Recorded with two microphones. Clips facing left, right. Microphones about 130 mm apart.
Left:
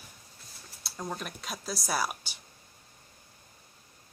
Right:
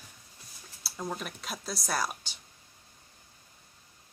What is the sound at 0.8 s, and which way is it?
Speech, centre (ahead or behind).